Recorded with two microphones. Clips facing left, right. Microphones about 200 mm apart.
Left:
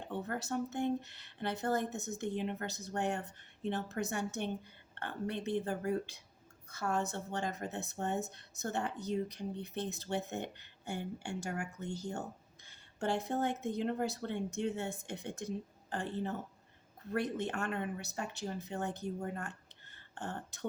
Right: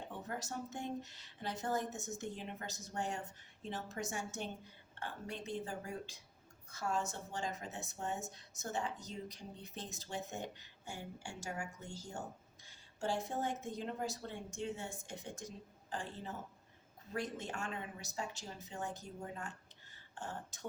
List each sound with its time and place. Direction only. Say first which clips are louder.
0.3 s a woman's voice: left 6 dB; 60° left (ahead or behind)